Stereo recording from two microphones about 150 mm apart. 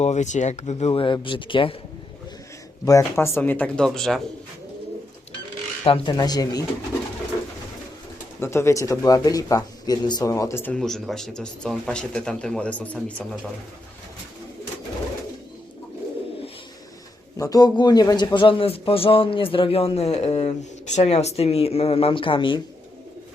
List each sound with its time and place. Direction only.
0.0 s speech: 50° left (ahead or behind); by 1.7 s 35° left (ahead or behind)
2.8 s speech: 20° left (ahead or behind); by 4.2 s 5° left (ahead or behind)
5.8 s speech: 35° left (ahead or behind)
8.4 s speech: 20° left (ahead or behind)
10.8 s speech: 5° left (ahead or behind)
17.3 s a man's voice: 25° left (ahead or behind)